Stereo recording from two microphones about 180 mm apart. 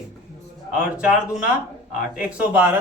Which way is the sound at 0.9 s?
5° right (ahead or behind).